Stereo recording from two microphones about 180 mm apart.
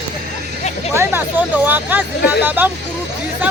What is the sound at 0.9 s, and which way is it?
Speech, 10° right (ahead or behind).